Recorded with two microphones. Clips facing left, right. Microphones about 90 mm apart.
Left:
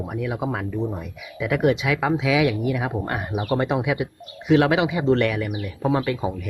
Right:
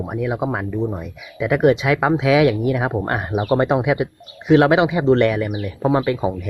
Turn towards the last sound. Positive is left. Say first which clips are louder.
# right 4 dB
turn(degrees=-25)  # may be behind; listen again after turning